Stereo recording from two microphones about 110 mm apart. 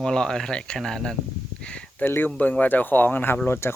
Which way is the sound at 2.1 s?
20° left (ahead or behind).